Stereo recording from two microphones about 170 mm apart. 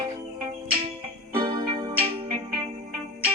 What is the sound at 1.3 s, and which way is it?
Music, 30° right (ahead or behind).